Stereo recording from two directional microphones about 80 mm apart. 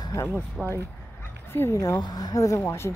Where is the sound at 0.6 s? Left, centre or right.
Centre.